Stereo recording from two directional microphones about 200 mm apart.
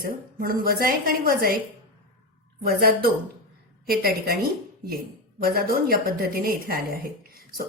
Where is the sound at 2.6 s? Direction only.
50° right (ahead or behind).